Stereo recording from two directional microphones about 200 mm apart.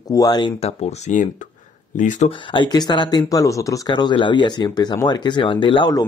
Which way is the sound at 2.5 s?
20° left (ahead or behind).